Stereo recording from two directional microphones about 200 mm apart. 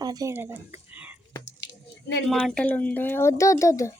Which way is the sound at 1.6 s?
60° left (ahead or behind).